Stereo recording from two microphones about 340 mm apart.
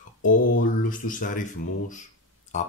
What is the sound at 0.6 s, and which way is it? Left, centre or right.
Speech, left.